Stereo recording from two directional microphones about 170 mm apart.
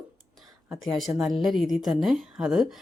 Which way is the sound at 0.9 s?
Centre (ahead or behind).